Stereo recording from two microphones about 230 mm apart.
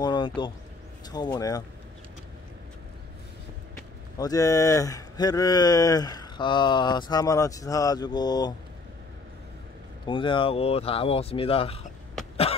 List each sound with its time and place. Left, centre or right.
0.0 s a sound: centre
1.0 s speech: centre
4.2 s speech: centre
10.0 s speech: left